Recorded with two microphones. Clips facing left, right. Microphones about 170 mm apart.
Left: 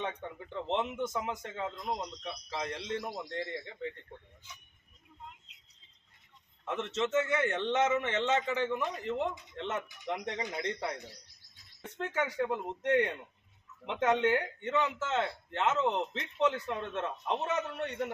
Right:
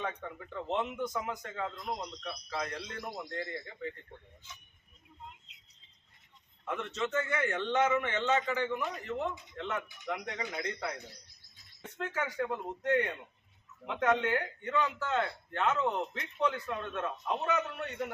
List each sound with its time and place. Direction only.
0.0 s a man's voice: 25° left (ahead or behind)
6.7 s a man's voice: 25° left (ahead or behind)
11.9 s a man's voice: 25° left (ahead or behind)